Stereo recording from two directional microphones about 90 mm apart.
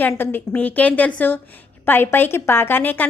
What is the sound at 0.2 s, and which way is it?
A woman's voice, 20° left (ahead or behind).